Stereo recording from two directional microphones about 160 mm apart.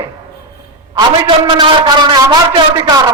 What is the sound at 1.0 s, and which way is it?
A man's voice, 30° right (ahead or behind).